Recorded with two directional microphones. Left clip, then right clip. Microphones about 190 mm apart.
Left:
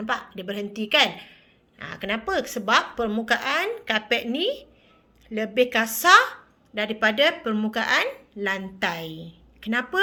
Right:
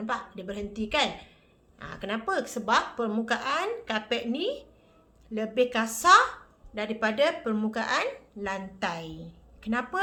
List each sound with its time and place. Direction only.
0.0 s a woman's voice: 25° left (ahead or behind)